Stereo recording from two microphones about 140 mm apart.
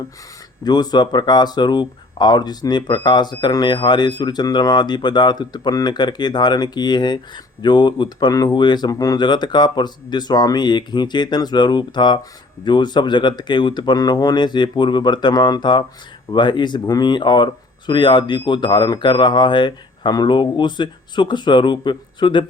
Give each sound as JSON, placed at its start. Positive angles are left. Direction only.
{"t": 0.6, "sound": "speech", "side_deg": 30}